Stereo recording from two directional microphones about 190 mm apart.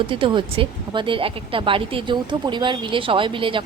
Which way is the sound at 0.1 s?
25° right (ahead or behind).